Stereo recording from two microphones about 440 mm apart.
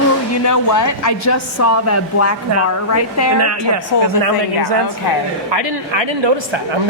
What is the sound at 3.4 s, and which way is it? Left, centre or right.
Speech, right.